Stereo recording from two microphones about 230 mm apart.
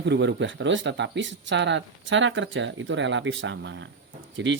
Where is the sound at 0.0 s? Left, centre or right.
Right.